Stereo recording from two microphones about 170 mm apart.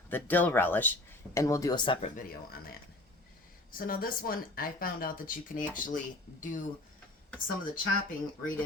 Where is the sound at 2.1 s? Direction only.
60° left (ahead or behind).